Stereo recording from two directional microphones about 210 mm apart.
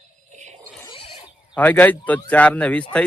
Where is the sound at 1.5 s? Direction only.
10° left (ahead or behind).